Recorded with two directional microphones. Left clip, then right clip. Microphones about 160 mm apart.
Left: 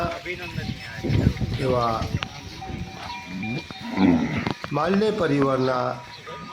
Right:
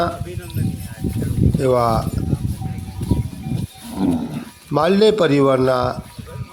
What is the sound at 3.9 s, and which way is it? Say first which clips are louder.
Speech: left 1 dB; 25° right (ahead or behind).